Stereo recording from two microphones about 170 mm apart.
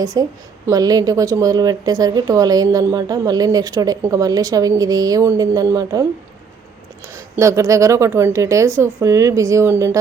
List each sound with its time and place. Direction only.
0.0 s speech: 20° right (ahead or behind)
7.3 s speech: 20° right (ahead or behind)